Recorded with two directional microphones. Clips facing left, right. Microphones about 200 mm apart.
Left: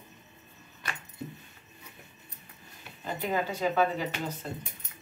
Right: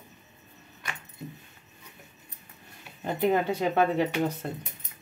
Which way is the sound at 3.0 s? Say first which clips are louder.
Right 6 dB; 60° right (ahead or behind).